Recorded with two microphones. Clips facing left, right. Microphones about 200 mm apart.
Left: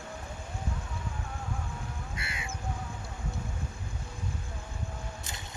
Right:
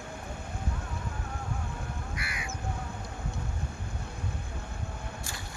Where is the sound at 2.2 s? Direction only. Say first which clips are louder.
Right 1 dB; 25° left (ahead or behind).